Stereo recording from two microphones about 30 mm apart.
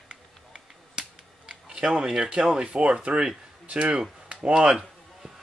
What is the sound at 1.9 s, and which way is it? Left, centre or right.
Speech, centre.